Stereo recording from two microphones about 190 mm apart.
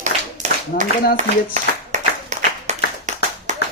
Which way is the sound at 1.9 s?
40° right (ahead or behind).